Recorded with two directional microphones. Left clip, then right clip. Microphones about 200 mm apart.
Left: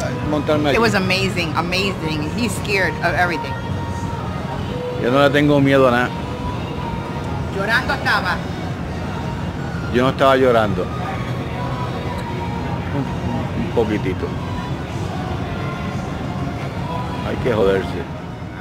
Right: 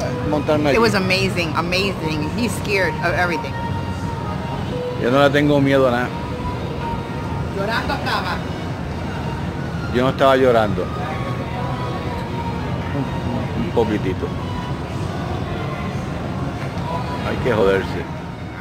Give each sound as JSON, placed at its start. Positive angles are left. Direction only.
{"t": 0.7, "sound": "speech", "side_deg": 5}
{"t": 5.0, "sound": "speech", "side_deg": 0}
{"t": 7.6, "sound": "speech", "side_deg": 25}
{"t": 9.9, "sound": "speech", "side_deg": 5}
{"t": 13.8, "sound": "speech", "side_deg": 0}
{"t": 17.5, "sound": "speech", "side_deg": 5}